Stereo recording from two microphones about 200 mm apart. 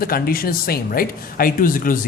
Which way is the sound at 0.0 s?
45° left (ahead or behind).